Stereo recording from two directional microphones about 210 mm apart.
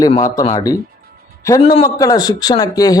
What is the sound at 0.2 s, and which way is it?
A man's voice, 15° left (ahead or behind).